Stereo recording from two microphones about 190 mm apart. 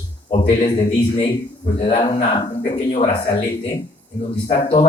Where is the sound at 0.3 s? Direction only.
25° left (ahead or behind).